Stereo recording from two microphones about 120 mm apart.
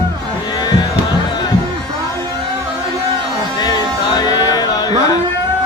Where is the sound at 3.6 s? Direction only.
35° left (ahead or behind).